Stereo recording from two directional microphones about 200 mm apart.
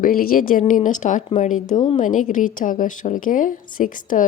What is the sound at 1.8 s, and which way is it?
Speech, 25° left (ahead or behind).